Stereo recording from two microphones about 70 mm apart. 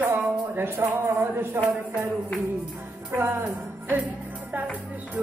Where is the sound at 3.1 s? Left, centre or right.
Right.